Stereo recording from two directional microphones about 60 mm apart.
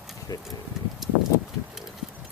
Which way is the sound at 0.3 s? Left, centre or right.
Left.